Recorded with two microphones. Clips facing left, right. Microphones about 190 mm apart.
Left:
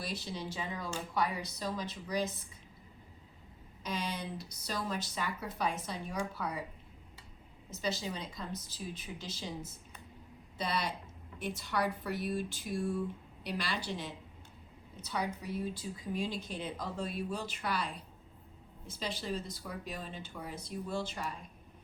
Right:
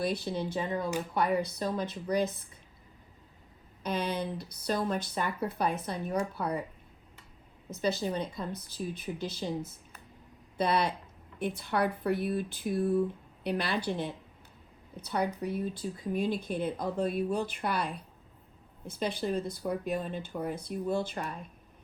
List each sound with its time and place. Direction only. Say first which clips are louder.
0.0 s speech: right 8 dB; 55° right (ahead or behind)
3.8 s speech: right 6 dB; 60° right (ahead or behind)
7.7 s speech: right 6 dB; 55° right (ahead or behind)